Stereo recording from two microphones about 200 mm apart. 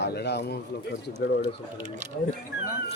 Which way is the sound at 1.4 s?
35° right (ahead or behind).